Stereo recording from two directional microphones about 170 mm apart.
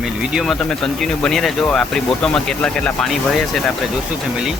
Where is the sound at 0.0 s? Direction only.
5° right (ahead or behind).